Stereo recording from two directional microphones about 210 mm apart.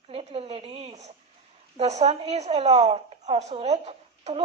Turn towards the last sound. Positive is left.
turn(degrees=-30)  # may be behind; listen again after turning